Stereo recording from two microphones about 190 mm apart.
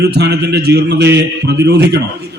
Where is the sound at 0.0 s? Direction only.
60° right (ahead or behind).